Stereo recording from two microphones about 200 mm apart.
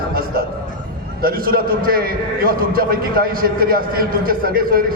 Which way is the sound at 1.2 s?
45° right (ahead or behind).